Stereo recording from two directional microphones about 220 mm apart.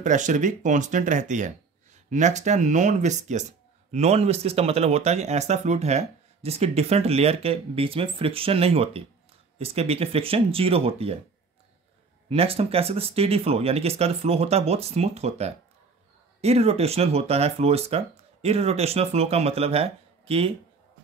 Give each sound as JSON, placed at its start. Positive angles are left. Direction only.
{"t": 0.0, "sound": "speech", "side_deg": -35}
{"t": 12.3, "sound": "speech", "side_deg": -25}